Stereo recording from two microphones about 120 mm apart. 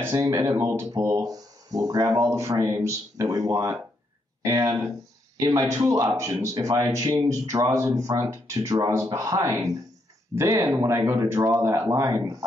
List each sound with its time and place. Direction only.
0.0 s speech: 25° right (ahead or behind)